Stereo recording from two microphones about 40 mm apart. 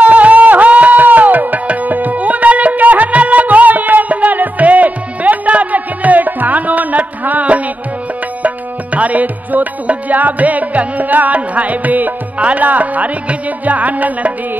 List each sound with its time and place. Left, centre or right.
0.0 s music: right